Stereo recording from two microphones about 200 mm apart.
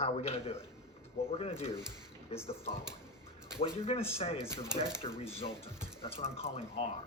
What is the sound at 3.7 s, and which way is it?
Speech, 30° left (ahead or behind).